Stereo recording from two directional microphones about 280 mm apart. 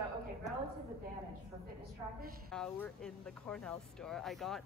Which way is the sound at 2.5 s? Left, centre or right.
Centre.